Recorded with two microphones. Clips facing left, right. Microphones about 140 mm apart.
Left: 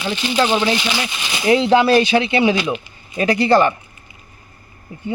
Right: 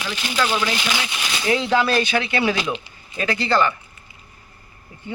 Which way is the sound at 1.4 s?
30° left (ahead or behind).